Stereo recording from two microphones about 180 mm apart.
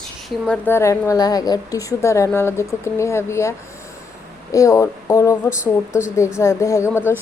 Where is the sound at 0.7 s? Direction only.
15° left (ahead or behind).